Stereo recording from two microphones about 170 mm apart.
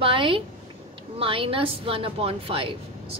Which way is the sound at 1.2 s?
30° right (ahead or behind).